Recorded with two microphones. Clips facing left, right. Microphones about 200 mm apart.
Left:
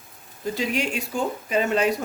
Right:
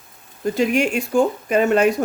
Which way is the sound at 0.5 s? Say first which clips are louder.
Right 8 dB; 50° right (ahead or behind).